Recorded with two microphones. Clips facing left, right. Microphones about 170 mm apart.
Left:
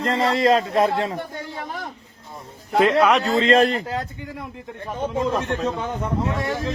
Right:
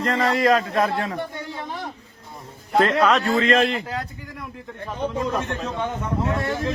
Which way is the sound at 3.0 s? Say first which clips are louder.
Left 1 dB; 15° left (ahead or behind).